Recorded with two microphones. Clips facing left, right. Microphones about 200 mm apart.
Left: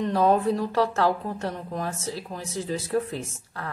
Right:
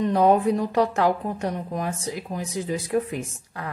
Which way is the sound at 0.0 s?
15° right (ahead or behind).